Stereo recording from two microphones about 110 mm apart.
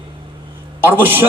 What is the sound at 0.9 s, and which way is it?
Speech, 20° right (ahead or behind).